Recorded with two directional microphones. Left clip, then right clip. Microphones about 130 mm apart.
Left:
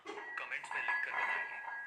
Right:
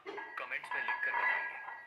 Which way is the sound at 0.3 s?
30° right (ahead or behind).